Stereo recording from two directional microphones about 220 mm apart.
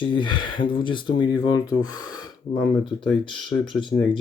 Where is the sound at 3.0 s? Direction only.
20° left (ahead or behind).